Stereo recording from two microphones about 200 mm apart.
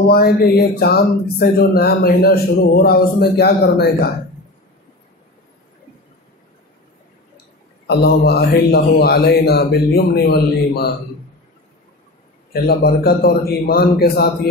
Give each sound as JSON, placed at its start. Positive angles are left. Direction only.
{"t": 0.1, "sound": "speech", "side_deg": 50}
{"t": 7.8, "sound": "speech", "side_deg": 55}
{"t": 12.6, "sound": "speech", "side_deg": 50}